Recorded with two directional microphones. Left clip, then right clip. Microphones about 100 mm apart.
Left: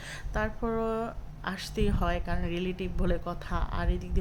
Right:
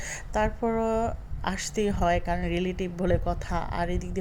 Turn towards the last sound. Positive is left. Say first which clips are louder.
# right 5 dB
turn(degrees=-30)  # may be behind; listen again after turning